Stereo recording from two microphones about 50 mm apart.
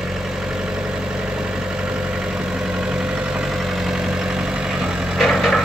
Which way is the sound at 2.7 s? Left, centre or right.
Centre.